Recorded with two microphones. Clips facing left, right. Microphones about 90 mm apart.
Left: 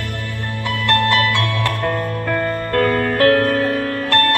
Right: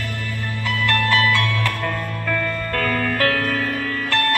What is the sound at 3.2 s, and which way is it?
Music, 40° left (ahead or behind).